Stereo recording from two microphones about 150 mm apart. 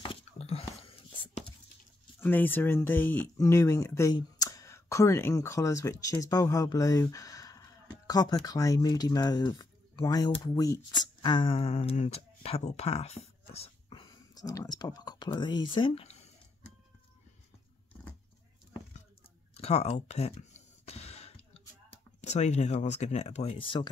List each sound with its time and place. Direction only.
0.0 s whispering: 40° left (ahead or behind)
2.1 s speech: 10° left (ahead or behind); by 16.3 s 45° left (ahead or behind)
19.5 s a sound: 45° left (ahead or behind)
21.9 s speech: 50° left (ahead or behind)